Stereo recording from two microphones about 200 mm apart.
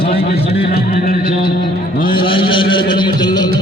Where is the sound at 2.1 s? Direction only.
25° left (ahead or behind).